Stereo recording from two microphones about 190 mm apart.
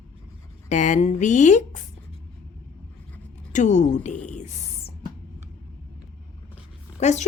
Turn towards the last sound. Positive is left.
turn(degrees=35)  # may be behind; listen again after turning